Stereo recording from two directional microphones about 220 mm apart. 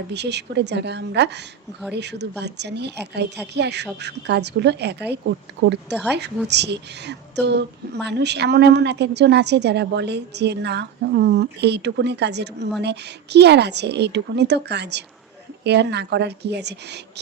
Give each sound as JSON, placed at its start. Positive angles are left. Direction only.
{"t": 0.1, "sound": "a woman's voice", "side_deg": -50}